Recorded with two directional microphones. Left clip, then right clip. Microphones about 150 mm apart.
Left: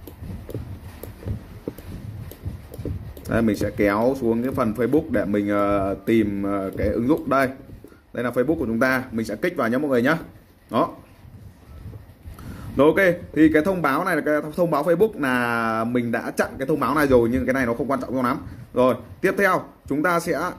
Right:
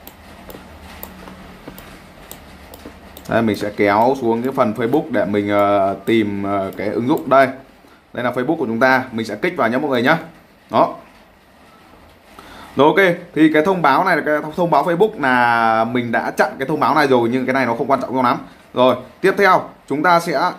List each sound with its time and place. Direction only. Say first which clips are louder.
3.3 s speech: right 5 dB; 30° left (ahead or behind)
12.7 s speech: right 4 dB; 30° left (ahead or behind)